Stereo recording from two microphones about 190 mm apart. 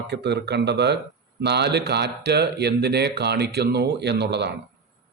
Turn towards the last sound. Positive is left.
turn(degrees=-65)  # may be behind; listen again after turning